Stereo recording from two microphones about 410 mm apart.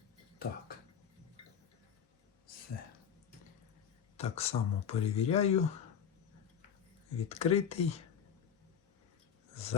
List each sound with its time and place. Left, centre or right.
4.2 s speech: centre
7.2 s speech: centre